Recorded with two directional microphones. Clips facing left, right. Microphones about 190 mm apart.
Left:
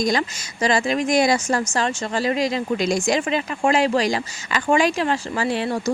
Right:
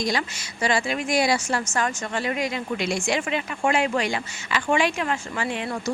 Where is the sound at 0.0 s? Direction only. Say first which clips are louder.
Left 5 dB; 45° left (ahead or behind).